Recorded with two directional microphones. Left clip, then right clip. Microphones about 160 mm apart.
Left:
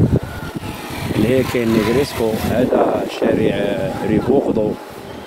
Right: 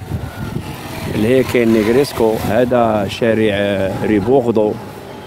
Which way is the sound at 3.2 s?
60° right (ahead or behind).